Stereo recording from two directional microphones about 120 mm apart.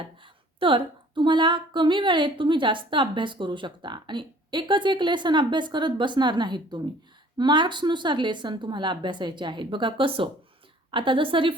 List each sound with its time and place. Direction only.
0.0 s a woman's voice: 45° right (ahead or behind)